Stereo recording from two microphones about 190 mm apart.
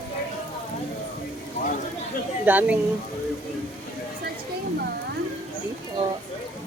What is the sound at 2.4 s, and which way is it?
Speech, 10° right (ahead or behind).